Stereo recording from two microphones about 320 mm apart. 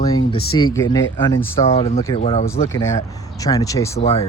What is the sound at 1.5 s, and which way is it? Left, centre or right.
Speech, centre.